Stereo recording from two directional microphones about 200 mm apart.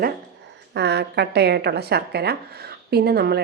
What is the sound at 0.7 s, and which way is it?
A woman's voice, 55° right (ahead or behind).